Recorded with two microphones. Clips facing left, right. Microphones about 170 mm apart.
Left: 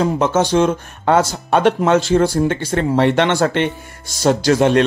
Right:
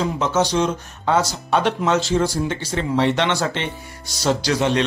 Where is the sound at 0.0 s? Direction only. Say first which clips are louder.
Left 4 dB; 50° left (ahead or behind).